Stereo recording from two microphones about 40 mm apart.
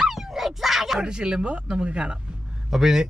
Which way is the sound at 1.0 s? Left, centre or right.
Right.